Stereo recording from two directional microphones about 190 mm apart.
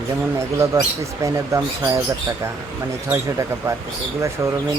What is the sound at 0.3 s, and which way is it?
Speech, 15° right (ahead or behind).